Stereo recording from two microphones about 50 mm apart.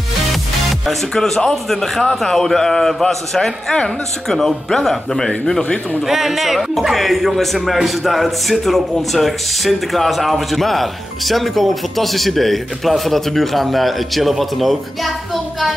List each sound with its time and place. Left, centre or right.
1.1 s a man's voice: centre
6.0 s a man's voice: centre